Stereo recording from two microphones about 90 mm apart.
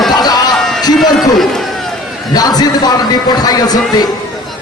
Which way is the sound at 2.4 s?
45° left (ahead or behind).